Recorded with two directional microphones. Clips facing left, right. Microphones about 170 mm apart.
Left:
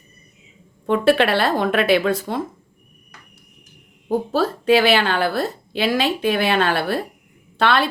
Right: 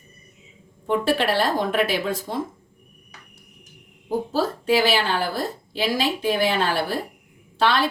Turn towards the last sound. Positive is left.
turn(degrees=60)  # may be behind; listen again after turning